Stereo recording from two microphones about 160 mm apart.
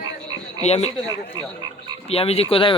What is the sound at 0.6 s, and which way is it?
Speech, 40° left (ahead or behind).